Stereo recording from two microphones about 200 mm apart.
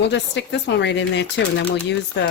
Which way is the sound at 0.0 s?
60° left (ahead or behind).